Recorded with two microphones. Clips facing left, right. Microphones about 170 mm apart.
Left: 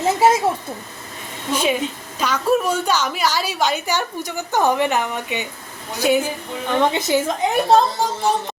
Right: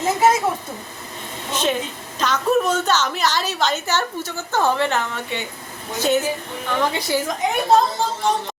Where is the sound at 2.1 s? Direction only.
10° left (ahead or behind).